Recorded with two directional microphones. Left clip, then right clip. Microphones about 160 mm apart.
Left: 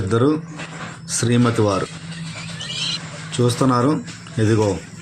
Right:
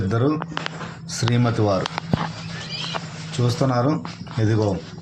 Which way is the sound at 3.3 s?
10° left (ahead or behind).